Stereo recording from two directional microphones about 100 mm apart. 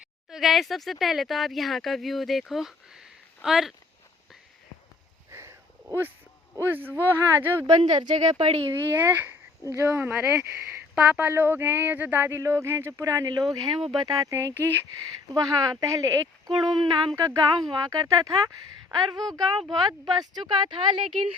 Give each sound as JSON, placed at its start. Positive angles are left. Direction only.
{"t": 0.3, "sound": "speech", "side_deg": 0}
{"t": 5.3, "sound": "a sound", "side_deg": -25}
{"t": 6.6, "sound": "speech", "side_deg": -20}
{"t": 7.9, "sound": "speech", "side_deg": -50}
{"t": 8.4, "sound": "speech", "side_deg": -75}
{"t": 8.8, "sound": "speech", "side_deg": -20}
{"t": 15.3, "sound": "speech", "side_deg": -40}
{"t": 16.5, "sound": "speech", "side_deg": -50}
{"t": 17.2, "sound": "speech", "side_deg": -40}